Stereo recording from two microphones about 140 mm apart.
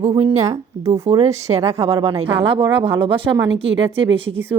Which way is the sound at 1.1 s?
45° right (ahead or behind).